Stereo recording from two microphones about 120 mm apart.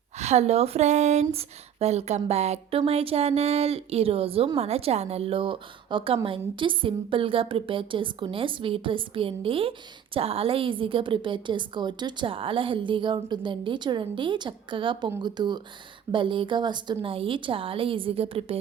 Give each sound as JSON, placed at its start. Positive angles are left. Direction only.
{"t": 0.2, "sound": "a woman's voice", "side_deg": -70}